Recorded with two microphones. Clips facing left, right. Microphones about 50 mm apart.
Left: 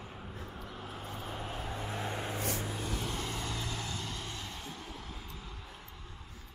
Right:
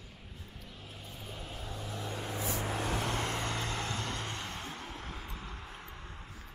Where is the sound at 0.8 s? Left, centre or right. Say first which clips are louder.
Left 6 dB; left.